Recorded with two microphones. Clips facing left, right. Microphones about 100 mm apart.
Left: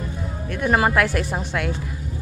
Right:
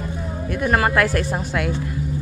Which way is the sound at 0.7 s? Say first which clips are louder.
Even; 5° left (ahead or behind).